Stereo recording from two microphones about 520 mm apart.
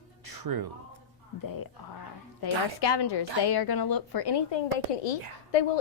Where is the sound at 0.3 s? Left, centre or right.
Right.